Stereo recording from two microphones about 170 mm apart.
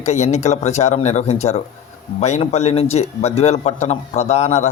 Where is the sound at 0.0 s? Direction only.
40° left (ahead or behind).